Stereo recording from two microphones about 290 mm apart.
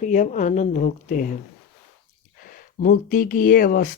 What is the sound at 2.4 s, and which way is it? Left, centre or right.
Speech, left.